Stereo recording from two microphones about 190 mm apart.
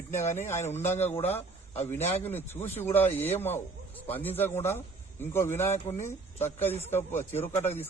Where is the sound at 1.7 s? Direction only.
10° left (ahead or behind).